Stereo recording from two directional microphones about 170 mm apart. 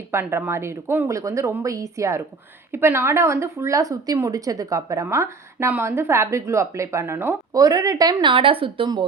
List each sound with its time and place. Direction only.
0.1 s a woman's voice: 15° right (ahead or behind)